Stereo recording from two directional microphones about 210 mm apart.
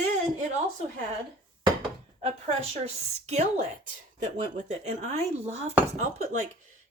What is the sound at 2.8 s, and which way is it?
Speech, 30° right (ahead or behind).